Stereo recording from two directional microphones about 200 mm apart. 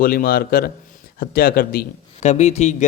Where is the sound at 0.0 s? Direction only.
45° left (ahead or behind).